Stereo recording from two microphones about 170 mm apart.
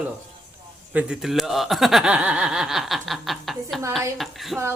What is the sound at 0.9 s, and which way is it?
Speech, 5° right (ahead or behind).